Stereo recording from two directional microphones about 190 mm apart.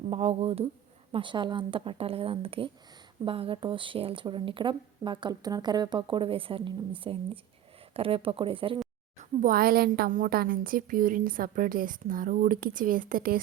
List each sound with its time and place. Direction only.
0.1 s speech: 30° right (ahead or behind)
9.1 s a woman's voice: 45° right (ahead or behind)